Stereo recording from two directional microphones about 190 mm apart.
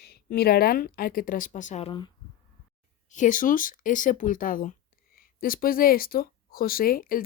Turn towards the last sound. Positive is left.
turn(degrees=50)  # may be behind; listen again after turning